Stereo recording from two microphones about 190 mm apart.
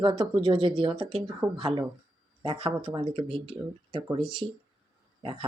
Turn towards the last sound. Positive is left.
turn(degrees=-30)  # may be behind; listen again after turning